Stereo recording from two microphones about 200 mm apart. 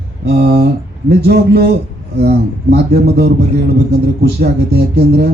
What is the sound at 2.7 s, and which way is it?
Speech, 55° right (ahead or behind).